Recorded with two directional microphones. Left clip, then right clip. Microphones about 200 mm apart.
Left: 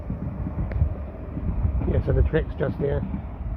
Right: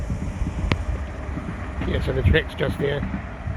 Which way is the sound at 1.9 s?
5° left (ahead or behind).